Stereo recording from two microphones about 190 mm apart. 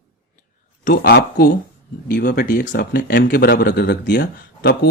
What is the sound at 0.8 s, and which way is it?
Speech, 55° left (ahead or behind).